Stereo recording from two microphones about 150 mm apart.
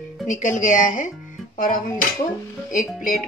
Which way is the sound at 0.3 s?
55° left (ahead or behind).